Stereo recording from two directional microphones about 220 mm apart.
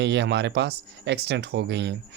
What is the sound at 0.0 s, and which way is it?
Speech, 50° right (ahead or behind).